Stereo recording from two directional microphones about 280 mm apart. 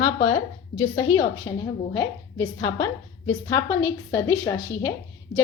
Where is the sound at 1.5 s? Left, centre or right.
Centre.